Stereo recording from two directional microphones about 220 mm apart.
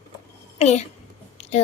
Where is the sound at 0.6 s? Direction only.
30° left (ahead or behind).